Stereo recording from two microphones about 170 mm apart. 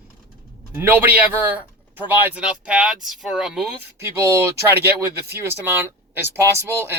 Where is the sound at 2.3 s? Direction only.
5° right (ahead or behind).